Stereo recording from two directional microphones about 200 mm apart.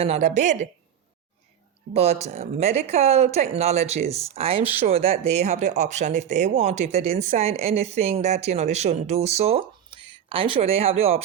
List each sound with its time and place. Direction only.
0.0 s speech: 35° right (ahead or behind)
1.9 s speech: 30° right (ahead or behind)